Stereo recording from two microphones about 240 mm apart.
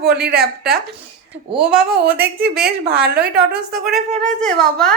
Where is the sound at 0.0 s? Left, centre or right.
Right.